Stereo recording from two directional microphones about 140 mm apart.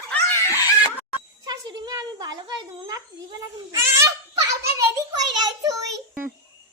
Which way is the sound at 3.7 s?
20° right (ahead or behind).